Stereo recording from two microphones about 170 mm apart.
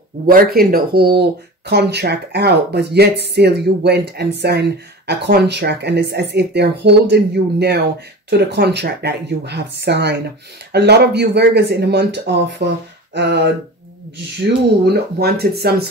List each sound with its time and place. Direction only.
0.3 s speech: 60° right (ahead or behind); by 12.6 s 90° right
13.1 s speech: 80° right
14.9 s speech: 70° right (ahead or behind)